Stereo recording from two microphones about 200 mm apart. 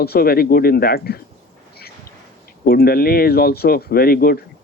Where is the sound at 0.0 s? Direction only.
50° left (ahead or behind).